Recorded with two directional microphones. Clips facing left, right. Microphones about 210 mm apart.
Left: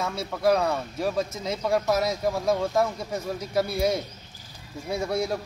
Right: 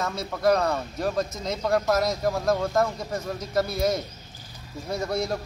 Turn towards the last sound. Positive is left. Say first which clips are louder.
# left 1 dB
turn(degrees=10)  # may be behind; listen again after turning